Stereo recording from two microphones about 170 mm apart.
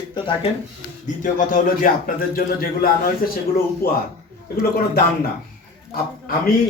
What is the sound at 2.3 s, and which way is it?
A man's voice, 60° left (ahead or behind).